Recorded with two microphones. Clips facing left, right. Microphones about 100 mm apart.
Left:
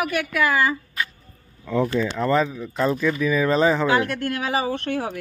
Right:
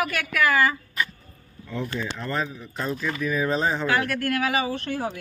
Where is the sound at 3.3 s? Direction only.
90° left.